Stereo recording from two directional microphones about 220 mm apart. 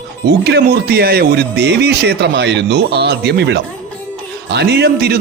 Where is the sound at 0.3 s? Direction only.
50° right (ahead or behind).